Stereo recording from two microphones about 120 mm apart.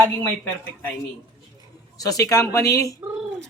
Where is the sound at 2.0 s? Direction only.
30° left (ahead or behind).